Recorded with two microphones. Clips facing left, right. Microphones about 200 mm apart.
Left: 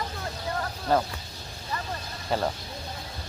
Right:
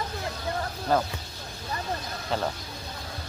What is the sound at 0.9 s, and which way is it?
Speech, centre (ahead or behind).